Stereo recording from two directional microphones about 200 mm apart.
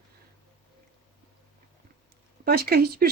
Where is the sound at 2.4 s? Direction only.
50° right (ahead or behind).